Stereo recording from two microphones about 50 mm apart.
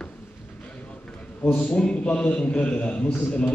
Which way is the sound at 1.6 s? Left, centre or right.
Centre.